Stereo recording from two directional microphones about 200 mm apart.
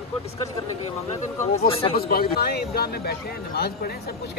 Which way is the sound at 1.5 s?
30° left (ahead or behind).